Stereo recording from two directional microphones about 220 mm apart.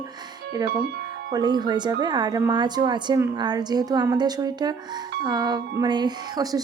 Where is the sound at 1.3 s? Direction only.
20° right (ahead or behind).